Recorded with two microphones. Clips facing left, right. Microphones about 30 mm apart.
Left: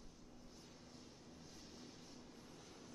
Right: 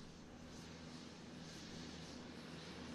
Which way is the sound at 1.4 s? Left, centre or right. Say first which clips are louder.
Right 4 dB; right.